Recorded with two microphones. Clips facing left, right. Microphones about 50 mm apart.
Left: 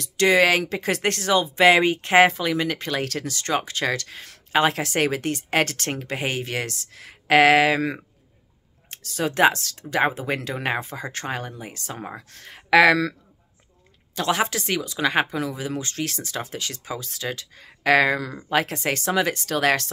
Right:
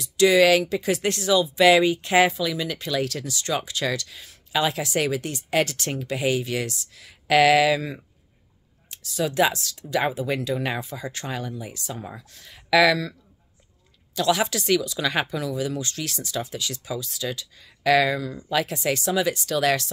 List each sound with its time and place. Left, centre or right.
0.0 s speech: left
8.9 s speech: left
14.1 s speech: left